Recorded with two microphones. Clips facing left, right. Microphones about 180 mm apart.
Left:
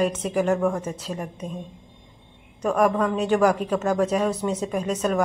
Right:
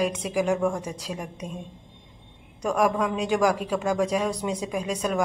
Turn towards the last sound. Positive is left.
turn(degrees=-10)  # may be behind; listen again after turning